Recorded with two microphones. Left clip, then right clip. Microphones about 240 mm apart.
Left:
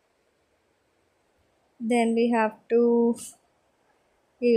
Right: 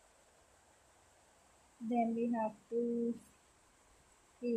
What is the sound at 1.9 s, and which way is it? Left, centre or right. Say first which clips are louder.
Speech: left 13 dB; left.